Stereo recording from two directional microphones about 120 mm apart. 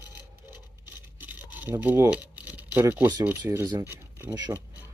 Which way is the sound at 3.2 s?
15° right (ahead or behind).